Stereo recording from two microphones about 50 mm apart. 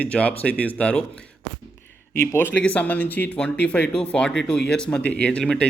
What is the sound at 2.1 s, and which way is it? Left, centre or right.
Speech, left.